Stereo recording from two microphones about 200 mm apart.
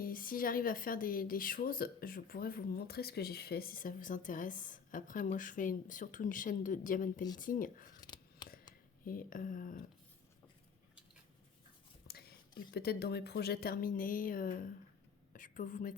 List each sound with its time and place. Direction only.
0.0 s speech: 45° left (ahead or behind)
8.0 s scissors: 20° left (ahead or behind)
9.0 s speech: 45° left (ahead or behind)
12.0 s a woman's voice: 50° left (ahead or behind)